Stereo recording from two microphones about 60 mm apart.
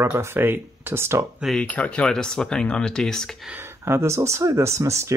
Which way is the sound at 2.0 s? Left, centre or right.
Centre.